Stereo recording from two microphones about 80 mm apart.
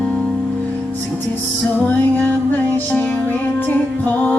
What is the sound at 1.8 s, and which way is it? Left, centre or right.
Music, centre.